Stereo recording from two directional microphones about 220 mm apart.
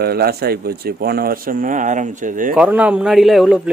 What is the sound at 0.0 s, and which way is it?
A man's voice, 45° right (ahead or behind).